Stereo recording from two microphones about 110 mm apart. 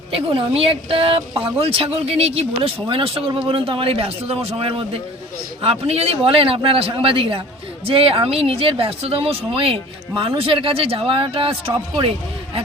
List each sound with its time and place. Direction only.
0.1 s speech: 60° right (ahead or behind)
5.6 s speech: 65° right (ahead or behind)